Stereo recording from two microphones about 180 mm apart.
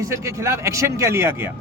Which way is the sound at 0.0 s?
15° right (ahead or behind).